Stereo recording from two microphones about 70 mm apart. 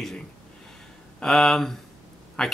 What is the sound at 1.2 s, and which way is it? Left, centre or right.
Speech, centre.